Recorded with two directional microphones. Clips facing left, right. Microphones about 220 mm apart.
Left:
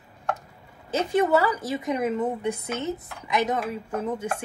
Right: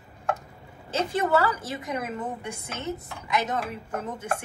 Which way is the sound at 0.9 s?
15° left (ahead or behind).